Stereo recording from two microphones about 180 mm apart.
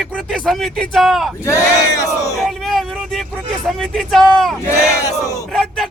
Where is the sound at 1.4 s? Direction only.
15° left (ahead or behind).